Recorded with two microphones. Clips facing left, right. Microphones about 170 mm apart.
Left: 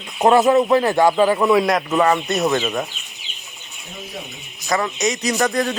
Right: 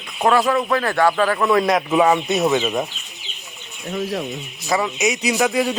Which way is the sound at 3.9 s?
90° right.